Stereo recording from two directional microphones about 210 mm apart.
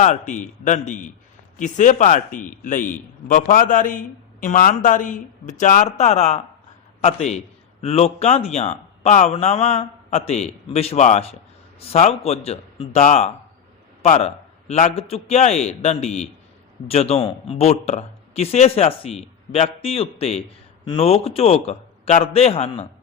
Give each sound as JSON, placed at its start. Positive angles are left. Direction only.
{"t": 0.0, "sound": "a man's voice", "side_deg": 35}